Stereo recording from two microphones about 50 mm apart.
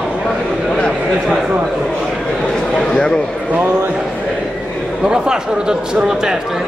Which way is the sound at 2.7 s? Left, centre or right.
Centre.